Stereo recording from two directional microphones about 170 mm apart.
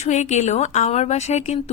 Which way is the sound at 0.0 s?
45° left (ahead or behind).